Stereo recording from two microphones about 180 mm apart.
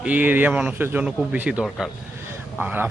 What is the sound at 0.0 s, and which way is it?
A man's voice, 10° right (ahead or behind).